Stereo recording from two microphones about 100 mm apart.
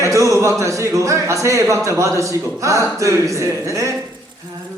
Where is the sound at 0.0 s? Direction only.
30° right (ahead or behind).